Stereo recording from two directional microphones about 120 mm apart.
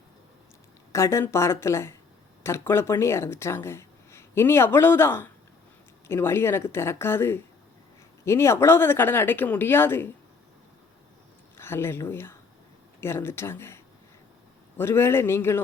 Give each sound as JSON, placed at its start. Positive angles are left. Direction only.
{"t": 0.9, "sound": "speech", "side_deg": 25}
{"t": 11.5, "sound": "speech", "side_deg": 20}